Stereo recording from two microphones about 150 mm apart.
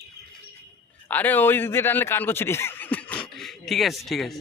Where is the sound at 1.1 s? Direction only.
10° left (ahead or behind).